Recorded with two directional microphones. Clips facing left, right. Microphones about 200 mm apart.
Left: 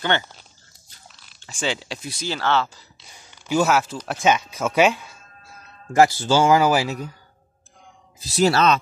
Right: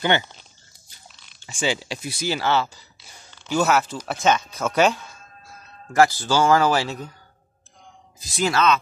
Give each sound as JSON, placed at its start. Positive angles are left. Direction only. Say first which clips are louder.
{"t": 1.1, "sound": "chewing", "louder": "left 1 dB", "side_deg": 0}
{"t": 1.4, "sound": "speech", "louder": "right 2 dB", "side_deg": 0}
{"t": 3.3, "sound": "a sound", "louder": "left 2 dB", "side_deg": 10}
{"t": 3.6, "sound": "speech", "louder": "right 3 dB", "side_deg": 0}
{"t": 4.2, "sound": "speech", "louder": "left 1 dB", "side_deg": 10}
{"t": 5.9, "sound": "speech", "louder": "left 2 dB", "side_deg": 20}
{"t": 8.3, "sound": "speech", "louder": "left 3 dB", "side_deg": 40}